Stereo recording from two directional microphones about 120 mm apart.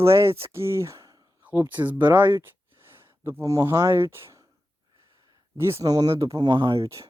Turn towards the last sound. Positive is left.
turn(degrees=-25)  # may be behind; listen again after turning